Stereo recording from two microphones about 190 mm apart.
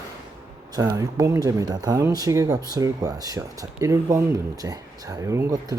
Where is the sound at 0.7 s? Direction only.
20° right (ahead or behind).